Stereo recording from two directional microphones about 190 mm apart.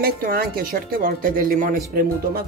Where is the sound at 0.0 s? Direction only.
50° right (ahead or behind).